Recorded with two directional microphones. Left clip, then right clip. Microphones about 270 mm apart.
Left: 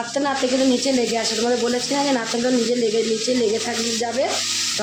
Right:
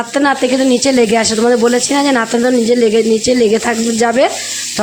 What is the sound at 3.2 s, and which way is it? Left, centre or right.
Speech, right.